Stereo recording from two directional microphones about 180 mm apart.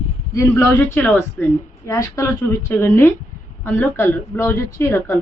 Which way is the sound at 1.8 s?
20° left (ahead or behind).